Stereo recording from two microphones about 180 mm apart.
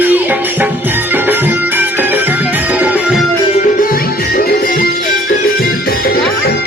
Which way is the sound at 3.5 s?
45° left (ahead or behind).